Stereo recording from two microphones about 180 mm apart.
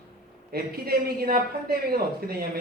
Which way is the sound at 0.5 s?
60° right (ahead or behind).